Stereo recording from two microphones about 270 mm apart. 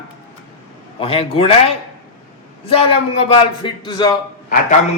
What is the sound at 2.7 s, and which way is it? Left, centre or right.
A man's voice, left.